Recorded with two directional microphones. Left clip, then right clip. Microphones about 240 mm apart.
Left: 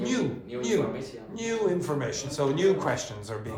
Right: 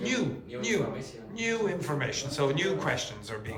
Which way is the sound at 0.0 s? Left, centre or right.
Centre.